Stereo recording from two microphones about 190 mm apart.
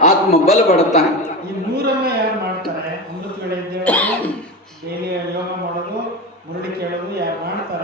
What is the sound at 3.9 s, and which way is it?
Cough, 10° left (ahead or behind).